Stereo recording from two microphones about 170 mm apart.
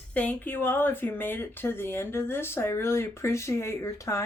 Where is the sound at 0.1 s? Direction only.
10° left (ahead or behind).